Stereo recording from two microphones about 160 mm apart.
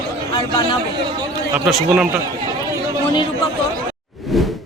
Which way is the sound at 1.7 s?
5° right (ahead or behind).